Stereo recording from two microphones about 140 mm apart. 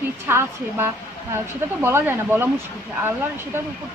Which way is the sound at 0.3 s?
15° right (ahead or behind).